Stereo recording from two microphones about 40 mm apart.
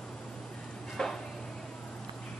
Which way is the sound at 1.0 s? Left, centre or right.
Centre.